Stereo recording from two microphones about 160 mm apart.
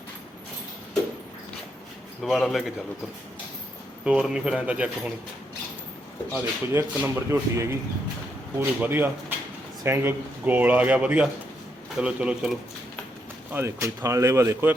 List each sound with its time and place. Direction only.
2.2 s speech: centre (ahead or behind)
4.0 s speech: 5° right (ahead or behind)
6.3 s speech: 10° right (ahead or behind)
13.5 s speech: 15° right (ahead or behind)